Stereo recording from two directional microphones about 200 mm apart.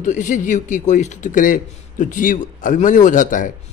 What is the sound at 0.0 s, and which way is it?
A man's voice, 40° left (ahead or behind).